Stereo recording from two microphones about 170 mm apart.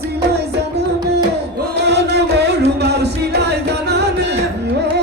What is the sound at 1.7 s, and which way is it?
Music, 80° right.